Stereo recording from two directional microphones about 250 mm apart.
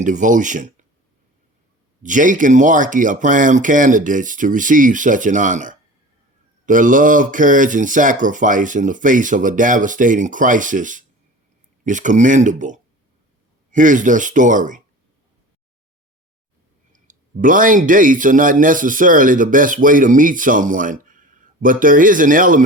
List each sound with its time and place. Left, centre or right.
0.0 s speech: right
2.0 s speech: right
16.9 s speech: right